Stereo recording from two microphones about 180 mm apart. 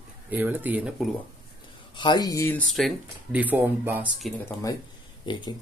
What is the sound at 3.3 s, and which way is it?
Speech, 10° right (ahead or behind).